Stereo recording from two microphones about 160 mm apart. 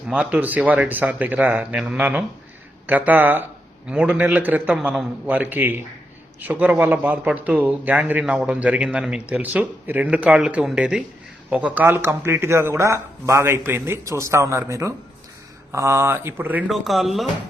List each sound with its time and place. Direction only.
0.1 s speech: 5° right (ahead or behind)